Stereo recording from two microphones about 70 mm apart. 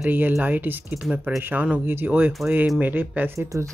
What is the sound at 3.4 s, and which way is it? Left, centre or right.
Speech, right.